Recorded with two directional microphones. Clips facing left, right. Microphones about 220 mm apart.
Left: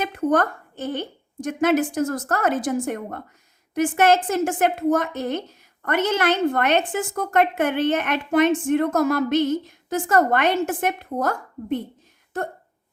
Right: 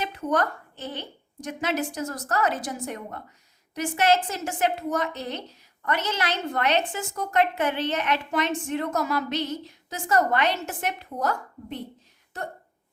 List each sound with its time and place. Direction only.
0.0 s a woman's voice: 50° left (ahead or behind)